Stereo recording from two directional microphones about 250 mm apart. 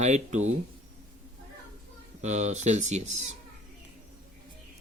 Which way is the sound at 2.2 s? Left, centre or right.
Right.